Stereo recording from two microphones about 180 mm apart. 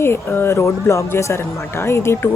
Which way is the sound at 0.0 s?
10° left (ahead or behind).